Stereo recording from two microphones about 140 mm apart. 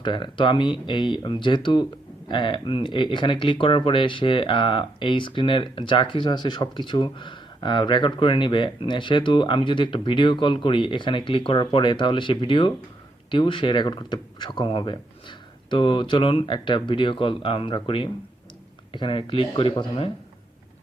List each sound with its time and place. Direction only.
0.0 s speech: 35° left (ahead or behind)